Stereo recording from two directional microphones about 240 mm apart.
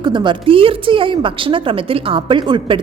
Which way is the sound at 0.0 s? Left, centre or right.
Centre.